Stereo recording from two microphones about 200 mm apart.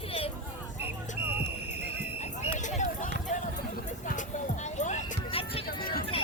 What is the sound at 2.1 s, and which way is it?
Clip-clop, 35° left (ahead or behind).